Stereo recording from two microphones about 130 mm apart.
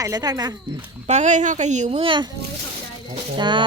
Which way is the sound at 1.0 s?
65° right (ahead or behind).